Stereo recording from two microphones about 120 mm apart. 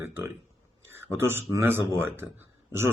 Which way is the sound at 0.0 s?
20° right (ahead or behind).